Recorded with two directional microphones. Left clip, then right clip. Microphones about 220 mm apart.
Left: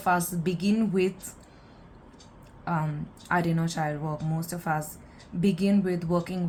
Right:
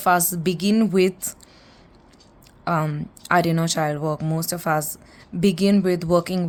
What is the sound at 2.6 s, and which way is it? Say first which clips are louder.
Speech: right 8 dB; 50° right (ahead or behind).